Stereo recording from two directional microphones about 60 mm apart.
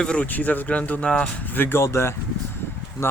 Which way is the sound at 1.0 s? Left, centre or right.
Centre.